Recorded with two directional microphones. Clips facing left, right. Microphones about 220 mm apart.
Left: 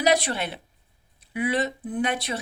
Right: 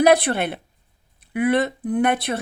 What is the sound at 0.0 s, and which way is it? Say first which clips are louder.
Speech: right 6 dB; 55° right (ahead or behind).